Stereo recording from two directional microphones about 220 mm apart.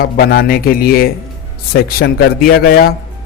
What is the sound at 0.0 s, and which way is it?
Speech, 45° left (ahead or behind).